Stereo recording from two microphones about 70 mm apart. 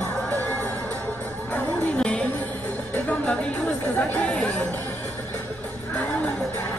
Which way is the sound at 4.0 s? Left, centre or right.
Centre.